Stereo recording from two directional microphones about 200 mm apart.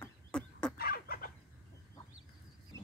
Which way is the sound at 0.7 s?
50° left (ahead or behind).